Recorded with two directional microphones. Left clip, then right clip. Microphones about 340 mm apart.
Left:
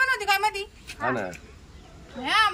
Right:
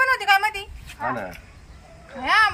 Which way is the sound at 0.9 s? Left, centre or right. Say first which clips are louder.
Even; centre.